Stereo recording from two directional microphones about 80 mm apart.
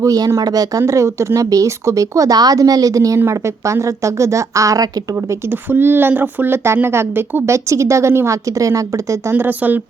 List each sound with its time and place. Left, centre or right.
0.0 s a woman's voice: right
5.3 s a woman's voice: right
9.3 s speech: right